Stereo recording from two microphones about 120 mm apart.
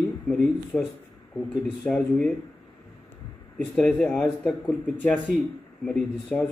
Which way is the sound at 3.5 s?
5° left (ahead or behind).